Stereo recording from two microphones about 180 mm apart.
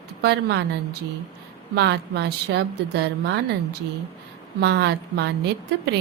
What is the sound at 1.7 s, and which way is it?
A woman's voice, 70° right (ahead or behind).